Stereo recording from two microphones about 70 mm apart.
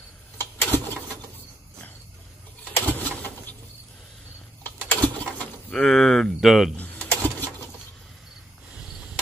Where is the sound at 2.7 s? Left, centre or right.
Left.